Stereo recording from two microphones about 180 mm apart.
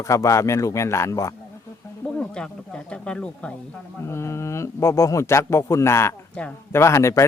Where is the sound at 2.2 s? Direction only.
5° left (ahead or behind).